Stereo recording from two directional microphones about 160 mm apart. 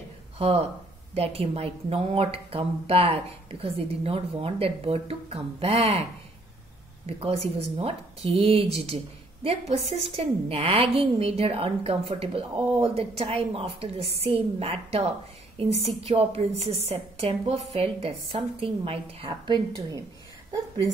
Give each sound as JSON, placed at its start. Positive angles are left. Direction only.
{"t": 0.4, "sound": "speech", "side_deg": -40}
{"t": 7.1, "sound": "speech", "side_deg": -40}